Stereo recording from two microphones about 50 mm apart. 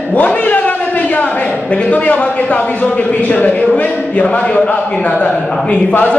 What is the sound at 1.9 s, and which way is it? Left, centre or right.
A man's voice, left.